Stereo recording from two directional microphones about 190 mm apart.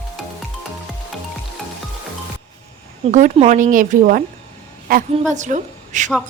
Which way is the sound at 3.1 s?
40° right (ahead or behind).